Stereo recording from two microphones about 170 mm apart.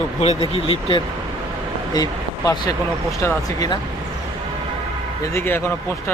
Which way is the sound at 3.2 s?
20° left (ahead or behind).